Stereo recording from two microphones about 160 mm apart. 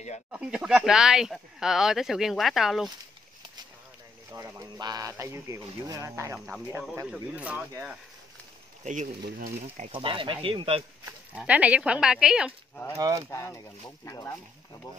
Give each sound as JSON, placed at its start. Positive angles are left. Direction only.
{"t": 0.3, "sound": "speech", "side_deg": -5}
{"t": 4.3, "sound": "speech", "side_deg": -20}
{"t": 7.1, "sound": "speech", "side_deg": -10}
{"t": 8.8, "sound": "speech", "side_deg": -50}
{"t": 9.8, "sound": "speech", "side_deg": -35}
{"t": 11.3, "sound": "speech", "side_deg": -10}
{"t": 12.9, "sound": "speech", "side_deg": -20}
{"t": 13.3, "sound": "speech", "side_deg": 20}